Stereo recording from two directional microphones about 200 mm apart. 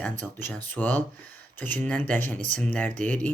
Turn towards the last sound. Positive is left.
turn(degrees=5)  # may be behind; listen again after turning